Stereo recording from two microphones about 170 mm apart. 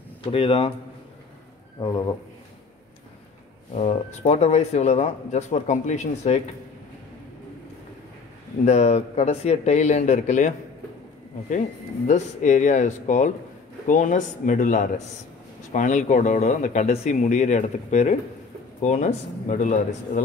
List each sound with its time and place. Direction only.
0.2 s speech: 30° left (ahead or behind)
1.8 s speech: 25° left (ahead or behind)
3.7 s speech: 40° left (ahead or behind)
8.6 s speech: 40° left (ahead or behind)
12.1 s speech: 45° left (ahead or behind)